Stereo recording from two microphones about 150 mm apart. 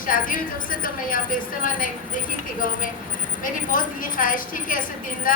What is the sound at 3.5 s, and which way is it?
Speech, 65° left (ahead or behind).